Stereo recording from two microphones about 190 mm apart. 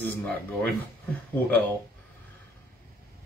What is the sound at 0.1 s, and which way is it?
Speech, 10° left (ahead or behind).